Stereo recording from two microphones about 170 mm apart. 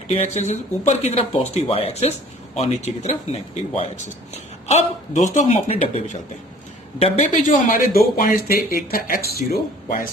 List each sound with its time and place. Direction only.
0.1 s speech: 40° left (ahead or behind); by 10.1 s 60° left (ahead or behind)